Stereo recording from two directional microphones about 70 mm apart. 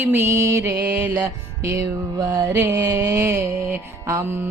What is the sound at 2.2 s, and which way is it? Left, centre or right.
Music, right.